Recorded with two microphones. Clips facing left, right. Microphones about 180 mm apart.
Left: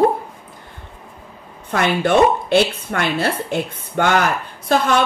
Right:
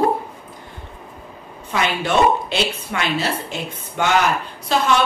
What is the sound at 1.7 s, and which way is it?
A woman's voice, 55° left (ahead or behind).